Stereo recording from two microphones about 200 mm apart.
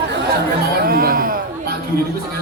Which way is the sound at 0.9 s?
45° right (ahead or behind).